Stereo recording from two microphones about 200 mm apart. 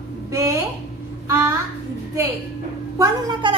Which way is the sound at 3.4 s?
25° right (ahead or behind).